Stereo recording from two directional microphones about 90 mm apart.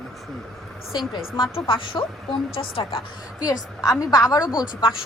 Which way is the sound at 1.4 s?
70° left (ahead or behind).